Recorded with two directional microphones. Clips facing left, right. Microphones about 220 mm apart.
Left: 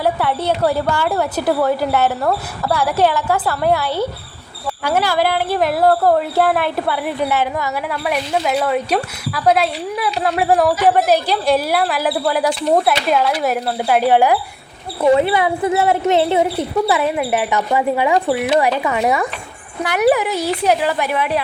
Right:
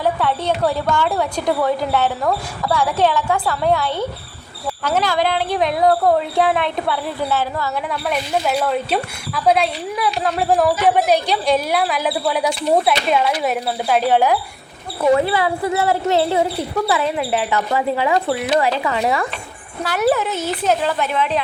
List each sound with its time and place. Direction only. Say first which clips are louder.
0.0 s a woman's voice: left 1 dB; 10° left (ahead or behind)
7.0 s a woman's voice: left 3 dB; 15° left (ahead or behind)
7.9 s a woman's voice: left 1 dB; 5° left (ahead or behind)